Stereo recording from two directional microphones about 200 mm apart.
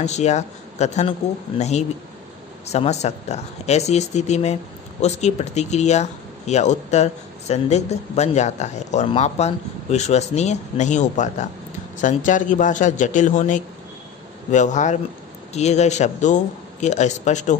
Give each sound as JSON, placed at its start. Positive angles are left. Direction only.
{"t": 0.0, "sound": "speech", "side_deg": 35}